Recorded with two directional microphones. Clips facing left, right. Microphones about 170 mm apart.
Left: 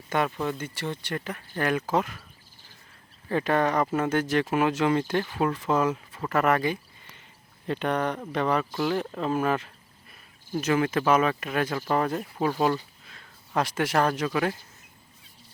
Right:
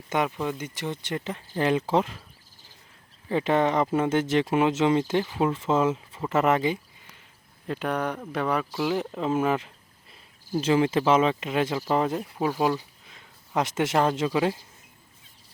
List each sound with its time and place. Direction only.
0.3 s speech: 10° right (ahead or behind); by 2.2 s 25° right (ahead or behind)
3.2 s speech: 20° right (ahead or behind)
7.7 s speech: 5° right (ahead or behind)